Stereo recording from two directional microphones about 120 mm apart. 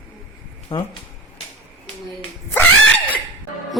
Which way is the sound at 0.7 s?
45° left (ahead or behind).